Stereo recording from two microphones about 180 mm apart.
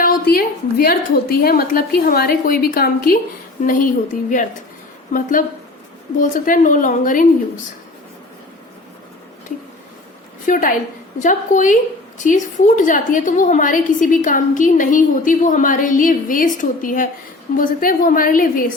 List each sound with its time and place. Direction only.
0.0 s a woman's voice: 55° left (ahead or behind)
10.4 s a woman's voice: 50° left (ahead or behind)